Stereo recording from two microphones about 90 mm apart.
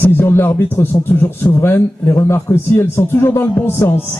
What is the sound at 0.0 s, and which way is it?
Music, 25° left (ahead or behind).